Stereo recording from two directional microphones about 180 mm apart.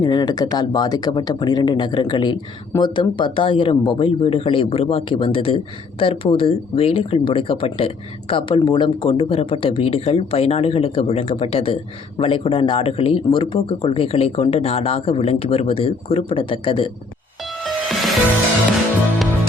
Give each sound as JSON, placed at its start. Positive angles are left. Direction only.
{"t": 0.0, "sound": "speech", "side_deg": 25}
{"t": 17.4, "sound": "music", "side_deg": 0}